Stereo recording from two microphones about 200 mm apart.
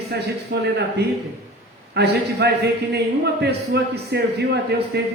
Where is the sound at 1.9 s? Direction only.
55° right (ahead or behind).